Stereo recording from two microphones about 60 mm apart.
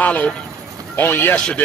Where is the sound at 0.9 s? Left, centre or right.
Left.